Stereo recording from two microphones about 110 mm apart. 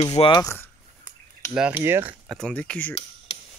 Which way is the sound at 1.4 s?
25° left (ahead or behind).